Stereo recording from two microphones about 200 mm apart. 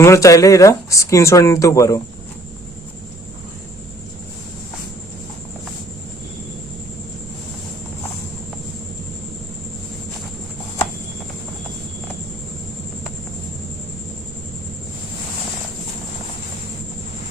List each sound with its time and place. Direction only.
0.0 s speech: 15° left (ahead or behind)